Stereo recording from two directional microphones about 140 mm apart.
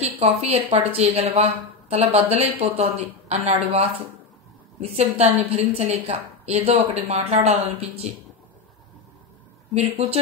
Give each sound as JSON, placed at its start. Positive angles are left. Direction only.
{"t": 0.0, "sound": "a woman's voice", "side_deg": -50}
{"t": 9.8, "sound": "a woman's voice", "side_deg": -50}